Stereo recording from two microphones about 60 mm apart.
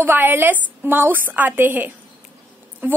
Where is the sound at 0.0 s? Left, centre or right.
Right.